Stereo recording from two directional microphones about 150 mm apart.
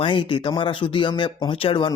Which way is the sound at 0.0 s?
35° left (ahead or behind).